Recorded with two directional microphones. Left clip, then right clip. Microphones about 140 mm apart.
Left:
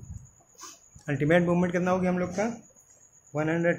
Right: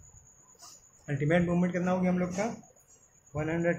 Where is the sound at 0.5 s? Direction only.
60° left (ahead or behind).